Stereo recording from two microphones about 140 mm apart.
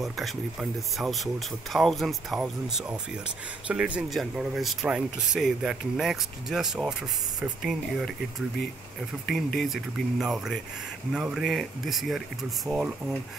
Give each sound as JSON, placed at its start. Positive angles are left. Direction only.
{"t": 0.0, "sound": "speech", "side_deg": 0}
{"t": 3.6, "sound": "speech", "side_deg": -10}